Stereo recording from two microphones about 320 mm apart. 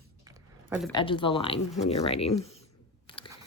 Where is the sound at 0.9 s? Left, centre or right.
Centre.